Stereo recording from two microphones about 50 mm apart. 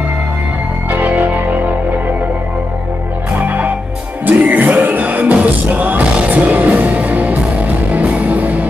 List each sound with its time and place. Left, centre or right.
0.8 s music: right
3.4 s music: right